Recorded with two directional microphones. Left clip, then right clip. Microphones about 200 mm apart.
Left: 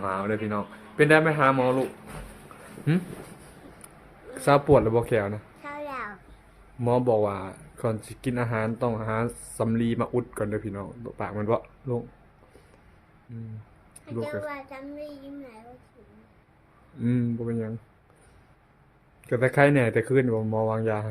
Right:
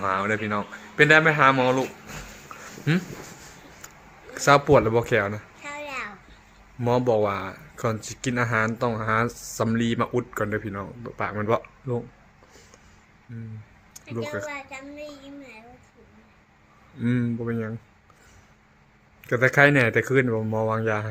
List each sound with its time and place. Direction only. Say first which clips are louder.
0.0 s a child's voice: right 4 dB; centre (ahead or behind)
4.4 s a child's voice: right 2 dB; 5° left (ahead or behind)
14.0 s a child's voice: right 1 dB; 15° left (ahead or behind)
17.0 s speech: right 1 dB; 5° left (ahead or behind)
19.3 s speech: right 3 dB; 5° left (ahead or behind)